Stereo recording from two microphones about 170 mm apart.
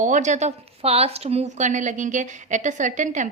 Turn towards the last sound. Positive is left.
turn(degrees=-45)  # may be behind; listen again after turning